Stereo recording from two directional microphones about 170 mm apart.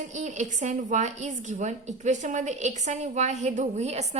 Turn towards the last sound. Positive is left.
turn(degrees=-40)  # may be behind; listen again after turning